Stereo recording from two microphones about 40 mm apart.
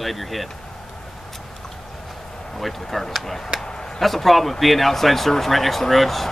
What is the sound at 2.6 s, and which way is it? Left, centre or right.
Speech, centre.